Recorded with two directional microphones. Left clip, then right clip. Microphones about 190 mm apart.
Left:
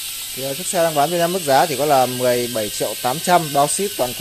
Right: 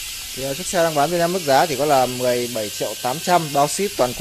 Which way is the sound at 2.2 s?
15° left (ahead or behind).